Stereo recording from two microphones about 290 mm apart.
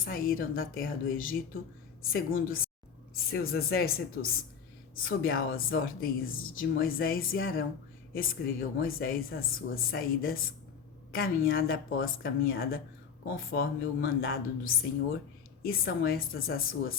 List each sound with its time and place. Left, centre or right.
0.0 s a woman's voice: left